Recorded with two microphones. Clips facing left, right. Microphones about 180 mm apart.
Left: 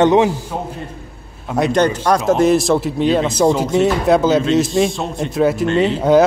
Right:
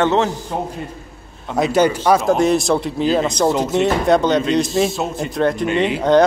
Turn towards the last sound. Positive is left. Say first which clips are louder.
# left 2 dB
turn(degrees=5)  # may be behind; listen again after turning